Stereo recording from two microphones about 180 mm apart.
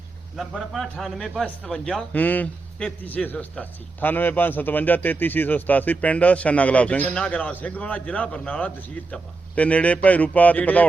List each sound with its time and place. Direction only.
0.3 s a man's voice: centre (ahead or behind)